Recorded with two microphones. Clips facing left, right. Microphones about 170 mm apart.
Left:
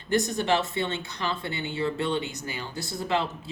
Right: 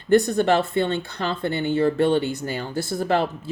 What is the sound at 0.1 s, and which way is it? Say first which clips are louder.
Speech: right 7 dB; 60° right (ahead or behind).